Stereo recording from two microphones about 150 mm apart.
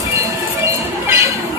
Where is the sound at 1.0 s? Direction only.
20° right (ahead or behind).